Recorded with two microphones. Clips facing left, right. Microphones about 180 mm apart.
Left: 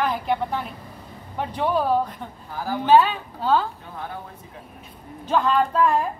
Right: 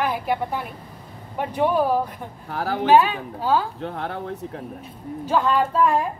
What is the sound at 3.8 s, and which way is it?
Speech, 70° right (ahead or behind).